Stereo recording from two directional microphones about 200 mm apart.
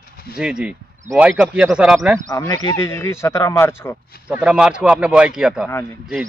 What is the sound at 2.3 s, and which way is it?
Speech, 20° left (ahead or behind).